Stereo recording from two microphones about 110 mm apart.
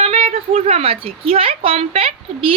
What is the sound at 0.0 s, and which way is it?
A woman's voice, 65° right (ahead or behind).